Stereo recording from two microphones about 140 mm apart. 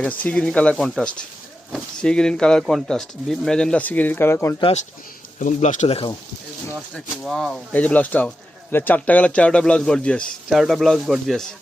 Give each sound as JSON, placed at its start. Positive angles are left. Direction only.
{"t": 0.0, "sound": "speech", "side_deg": 10}
{"t": 5.4, "sound": "speech", "side_deg": 60}
{"t": 6.9, "sound": "speech", "side_deg": 0}